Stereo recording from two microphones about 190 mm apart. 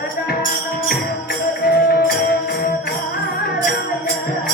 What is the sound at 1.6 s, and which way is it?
Music, 55° left (ahead or behind).